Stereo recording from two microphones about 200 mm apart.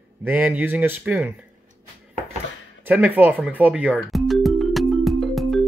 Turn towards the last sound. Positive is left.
turn(degrees=0)  # may be behind; listen again after turning